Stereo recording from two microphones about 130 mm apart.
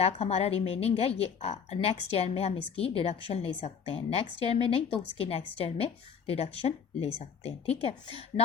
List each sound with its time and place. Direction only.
0.0 s a woman's voice: 55° left (ahead or behind)